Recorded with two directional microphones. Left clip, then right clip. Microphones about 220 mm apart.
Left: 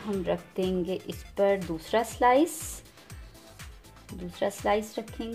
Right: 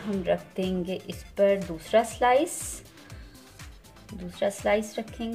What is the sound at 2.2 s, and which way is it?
Speech, 30° left (ahead or behind).